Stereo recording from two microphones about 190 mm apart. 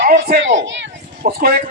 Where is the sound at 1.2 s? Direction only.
50° right (ahead or behind).